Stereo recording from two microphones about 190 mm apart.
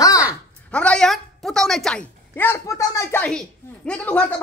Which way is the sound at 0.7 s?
5° left (ahead or behind).